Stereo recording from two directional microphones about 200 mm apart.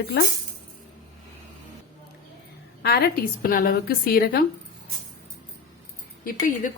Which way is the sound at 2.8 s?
50° left (ahead or behind).